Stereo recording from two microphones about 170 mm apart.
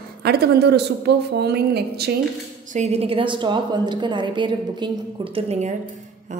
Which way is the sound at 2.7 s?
40° right (ahead or behind).